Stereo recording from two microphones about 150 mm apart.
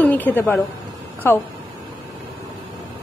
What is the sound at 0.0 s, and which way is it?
A woman's voice, 10° left (ahead or behind).